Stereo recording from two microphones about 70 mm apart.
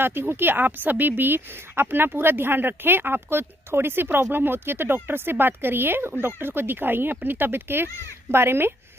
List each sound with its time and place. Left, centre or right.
0.0 s a woman's voice: right